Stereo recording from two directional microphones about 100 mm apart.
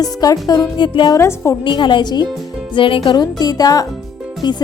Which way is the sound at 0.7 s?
50° left (ahead or behind).